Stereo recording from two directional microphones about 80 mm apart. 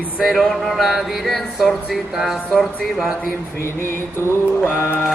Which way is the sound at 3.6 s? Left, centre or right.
Left.